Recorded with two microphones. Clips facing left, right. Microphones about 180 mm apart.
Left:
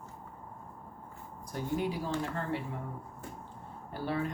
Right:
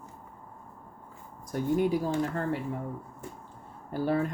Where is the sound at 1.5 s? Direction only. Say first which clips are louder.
Right 7 dB; 50° right (ahead or behind).